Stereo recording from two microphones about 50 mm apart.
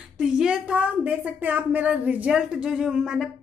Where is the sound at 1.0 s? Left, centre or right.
Right.